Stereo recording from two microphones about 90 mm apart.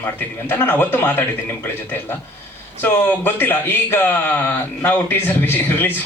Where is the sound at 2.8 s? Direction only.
20° left (ahead or behind).